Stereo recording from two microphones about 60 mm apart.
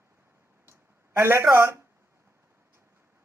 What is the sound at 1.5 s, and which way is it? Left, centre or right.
Speech, right.